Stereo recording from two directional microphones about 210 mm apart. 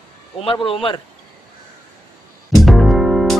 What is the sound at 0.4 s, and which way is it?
Speech, 25° left (ahead or behind).